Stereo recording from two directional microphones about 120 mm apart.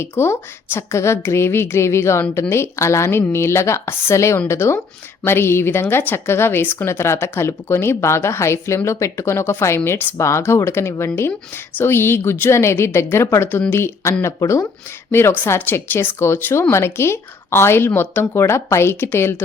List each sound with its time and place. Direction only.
0.0 s a woman's voice: 20° left (ahead or behind)